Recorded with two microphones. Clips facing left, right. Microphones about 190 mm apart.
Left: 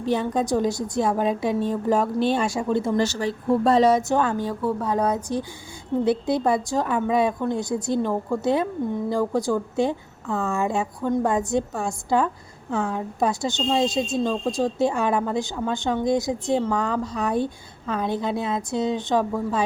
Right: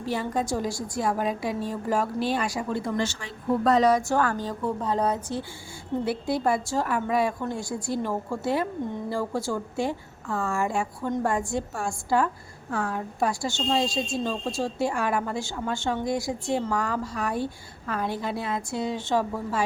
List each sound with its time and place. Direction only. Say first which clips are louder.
0.0 s a woman's voice: left 5 dB; 20° left (ahead or behind)
3.0 s a woman's voice: left 7 dB; 40° left (ahead or behind); by 4.4 s 20° left (ahead or behind)
4.4 s a woman's voice: left 3 dB; 10° left (ahead or behind)